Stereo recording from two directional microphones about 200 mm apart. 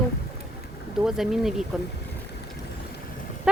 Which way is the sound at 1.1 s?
Centre (ahead or behind).